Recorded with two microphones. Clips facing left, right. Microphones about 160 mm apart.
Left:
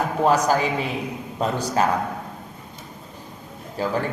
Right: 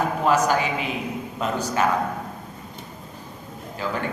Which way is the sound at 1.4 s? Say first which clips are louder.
Left 2 dB; 35° left (ahead or behind).